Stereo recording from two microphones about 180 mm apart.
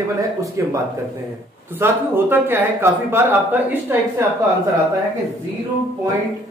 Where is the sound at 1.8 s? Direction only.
10° right (ahead or behind).